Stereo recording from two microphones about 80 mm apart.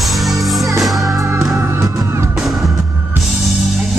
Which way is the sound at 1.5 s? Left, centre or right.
Right.